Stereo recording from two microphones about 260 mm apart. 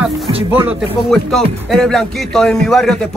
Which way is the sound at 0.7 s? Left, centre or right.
Centre.